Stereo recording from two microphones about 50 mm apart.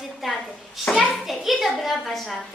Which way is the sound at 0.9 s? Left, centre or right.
Centre.